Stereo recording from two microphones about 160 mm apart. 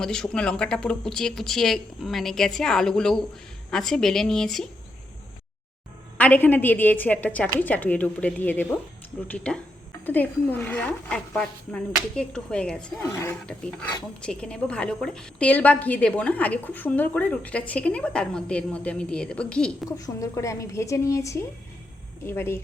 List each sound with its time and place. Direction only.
0.0 s speech: 5° left (ahead or behind)
6.1 s a woman's voice: 10° left (ahead or behind)
13.0 s a woman's voice: 15° left (ahead or behind)
20.0 s a woman's voice: 20° left (ahead or behind)